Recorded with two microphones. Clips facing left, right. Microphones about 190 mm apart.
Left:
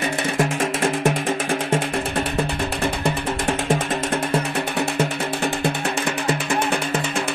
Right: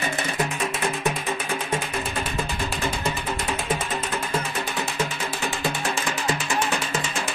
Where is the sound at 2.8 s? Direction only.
65° left (ahead or behind).